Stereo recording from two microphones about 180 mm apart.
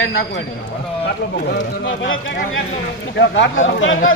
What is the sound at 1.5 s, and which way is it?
Speech, 90° left.